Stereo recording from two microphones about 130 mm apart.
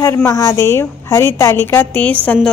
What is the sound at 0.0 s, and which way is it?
A woman's voice, 25° left (ahead or behind).